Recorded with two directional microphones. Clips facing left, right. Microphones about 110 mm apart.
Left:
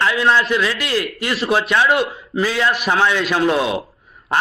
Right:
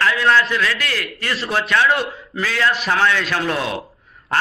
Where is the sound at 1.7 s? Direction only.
15° left (ahead or behind).